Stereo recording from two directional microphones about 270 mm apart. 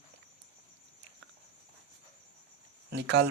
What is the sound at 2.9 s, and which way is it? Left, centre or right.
Speech, right.